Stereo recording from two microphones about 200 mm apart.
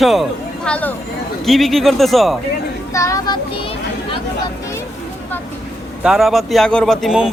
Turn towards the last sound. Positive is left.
turn(degrees=0)  # may be behind; listen again after turning